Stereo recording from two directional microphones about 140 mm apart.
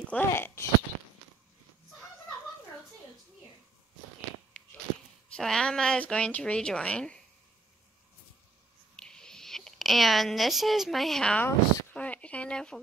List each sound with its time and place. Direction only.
0.3 s speech: 20° left (ahead or behind)
5.3 s a woman's voice: 5° left (ahead or behind)
8.9 s speech: 5° left (ahead or behind)